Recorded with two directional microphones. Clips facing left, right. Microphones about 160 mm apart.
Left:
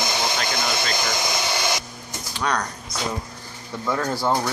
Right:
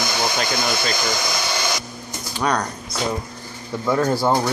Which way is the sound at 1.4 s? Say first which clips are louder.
Even; 15° left (ahead or behind).